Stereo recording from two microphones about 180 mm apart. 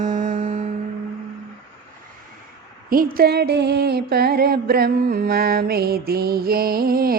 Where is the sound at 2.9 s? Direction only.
55° right (ahead or behind).